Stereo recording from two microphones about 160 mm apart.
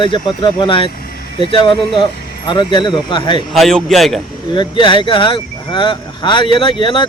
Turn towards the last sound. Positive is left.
turn(degrees=30)  # may be behind; listen again after turning